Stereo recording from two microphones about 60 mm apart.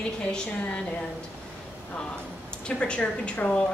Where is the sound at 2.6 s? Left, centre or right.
Centre.